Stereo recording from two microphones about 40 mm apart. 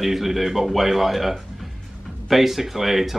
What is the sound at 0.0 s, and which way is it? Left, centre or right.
Speech, centre.